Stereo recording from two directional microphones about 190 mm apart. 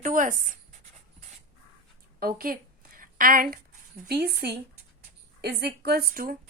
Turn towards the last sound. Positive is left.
turn(degrees=-50)  # may be behind; listen again after turning